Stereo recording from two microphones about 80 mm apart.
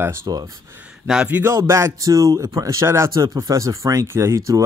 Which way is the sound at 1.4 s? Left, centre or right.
Right.